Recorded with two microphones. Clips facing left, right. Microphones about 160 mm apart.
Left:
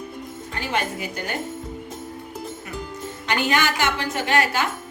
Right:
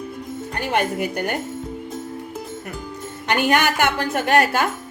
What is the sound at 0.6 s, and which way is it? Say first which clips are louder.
Speech: right 5 dB; 55° right (ahead or behind).